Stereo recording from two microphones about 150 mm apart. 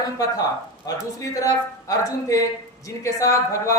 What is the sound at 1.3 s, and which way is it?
A woman's voice, 20° left (ahead or behind).